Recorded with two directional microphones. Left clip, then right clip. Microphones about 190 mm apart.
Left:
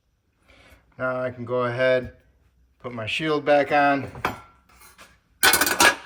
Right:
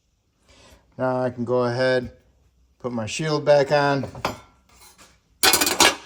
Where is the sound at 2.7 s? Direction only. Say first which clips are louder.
Even; 20° right (ahead or behind).